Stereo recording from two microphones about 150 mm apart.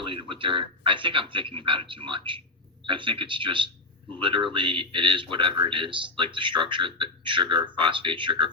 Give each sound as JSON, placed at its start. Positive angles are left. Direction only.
{"t": 0.0, "sound": "a man's voice", "side_deg": -35}